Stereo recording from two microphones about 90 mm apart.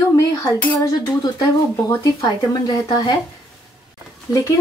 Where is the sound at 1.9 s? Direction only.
35° left (ahead or behind).